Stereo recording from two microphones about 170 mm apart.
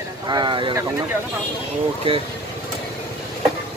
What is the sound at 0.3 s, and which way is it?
Speech, 25° right (ahead or behind).